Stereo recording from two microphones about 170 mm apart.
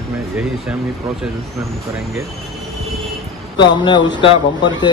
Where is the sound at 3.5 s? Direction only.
25° left (ahead or behind).